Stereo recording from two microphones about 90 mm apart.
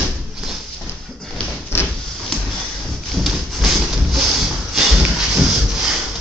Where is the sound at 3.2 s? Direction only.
Centre (ahead or behind).